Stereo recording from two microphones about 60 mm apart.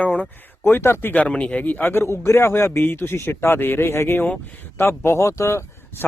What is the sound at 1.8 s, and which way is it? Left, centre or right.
A man's voice, left.